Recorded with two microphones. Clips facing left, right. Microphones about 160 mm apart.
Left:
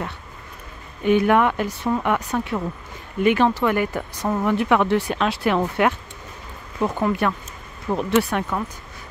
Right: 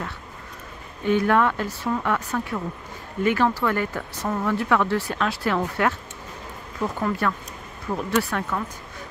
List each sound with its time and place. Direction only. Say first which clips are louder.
1.0 s speech: left 3 dB; 15° left (ahead or behind)